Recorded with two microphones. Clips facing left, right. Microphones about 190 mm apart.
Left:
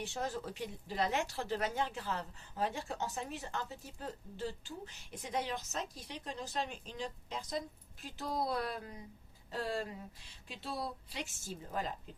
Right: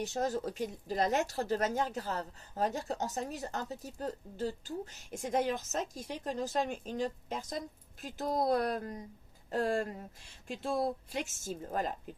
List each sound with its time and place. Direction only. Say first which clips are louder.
0.0 s a woman's voice: right 6 dB; 40° right (ahead or behind)